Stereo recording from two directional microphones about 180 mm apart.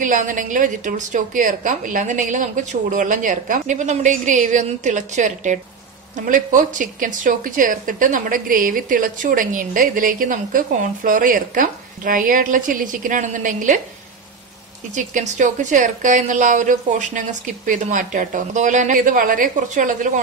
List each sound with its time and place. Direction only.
0.0 s speech: 45° right (ahead or behind)
15.0 s speech: 45° right (ahead or behind)